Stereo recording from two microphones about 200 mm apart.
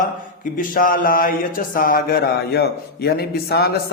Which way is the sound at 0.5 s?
45° left (ahead or behind).